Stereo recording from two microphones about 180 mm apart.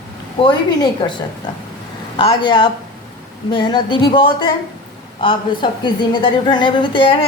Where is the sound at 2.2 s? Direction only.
25° left (ahead or behind).